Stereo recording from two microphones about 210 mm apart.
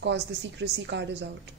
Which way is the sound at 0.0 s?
55° right (ahead or behind).